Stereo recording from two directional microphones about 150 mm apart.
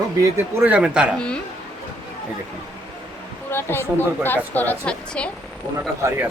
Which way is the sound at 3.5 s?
15° left (ahead or behind).